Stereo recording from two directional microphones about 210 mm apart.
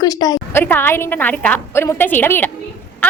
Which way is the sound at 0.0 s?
15° left (ahead or behind).